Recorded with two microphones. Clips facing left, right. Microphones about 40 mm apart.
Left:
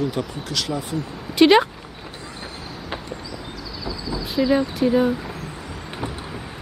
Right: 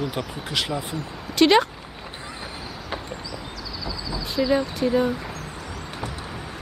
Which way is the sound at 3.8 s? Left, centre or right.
Centre.